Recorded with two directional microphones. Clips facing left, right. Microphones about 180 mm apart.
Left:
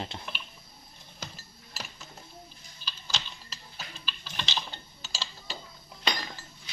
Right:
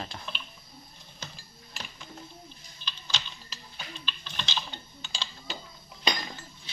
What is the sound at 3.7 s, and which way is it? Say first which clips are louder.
Tick-tock: right 2 dB; 5° left (ahead or behind).